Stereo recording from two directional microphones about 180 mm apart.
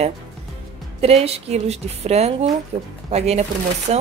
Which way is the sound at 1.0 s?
35° right (ahead or behind).